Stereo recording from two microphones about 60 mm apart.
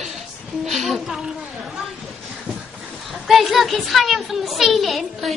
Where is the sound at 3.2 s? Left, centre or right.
Centre.